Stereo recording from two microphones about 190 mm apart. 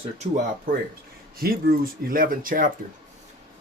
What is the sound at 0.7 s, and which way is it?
Speech, 45° right (ahead or behind).